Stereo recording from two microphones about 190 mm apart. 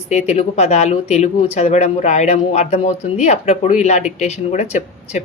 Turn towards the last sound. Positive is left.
turn(degrees=35)  # may be behind; listen again after turning